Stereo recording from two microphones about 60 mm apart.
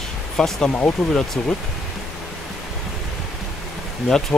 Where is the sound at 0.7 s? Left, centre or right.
Left.